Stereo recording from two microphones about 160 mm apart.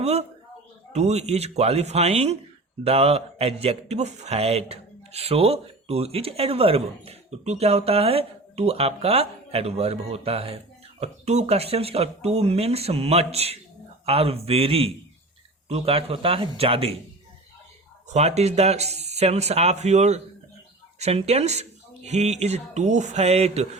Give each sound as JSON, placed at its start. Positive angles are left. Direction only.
{"t": 0.0, "sound": "speech", "side_deg": -40}
{"t": 18.1, "sound": "speech", "side_deg": -45}